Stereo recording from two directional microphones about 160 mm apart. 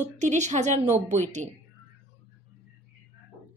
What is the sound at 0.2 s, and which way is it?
Speech, 45° right (ahead or behind).